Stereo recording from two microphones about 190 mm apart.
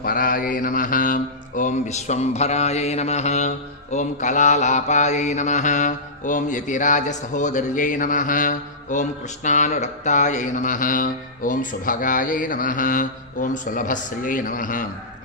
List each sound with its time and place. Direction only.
0.0 s mantra: 50° left (ahead or behind)